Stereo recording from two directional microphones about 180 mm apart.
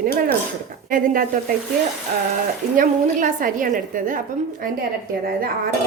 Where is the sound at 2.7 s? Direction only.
45° right (ahead or behind).